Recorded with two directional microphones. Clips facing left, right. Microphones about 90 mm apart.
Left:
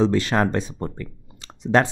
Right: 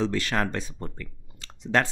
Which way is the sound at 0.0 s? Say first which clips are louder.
Left 7 dB; 25° left (ahead or behind).